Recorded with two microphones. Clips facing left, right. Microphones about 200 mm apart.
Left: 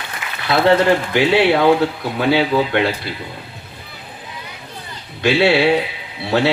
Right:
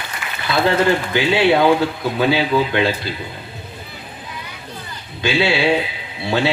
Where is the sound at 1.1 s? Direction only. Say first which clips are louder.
Left 1 dB; 65° left (ahead or behind).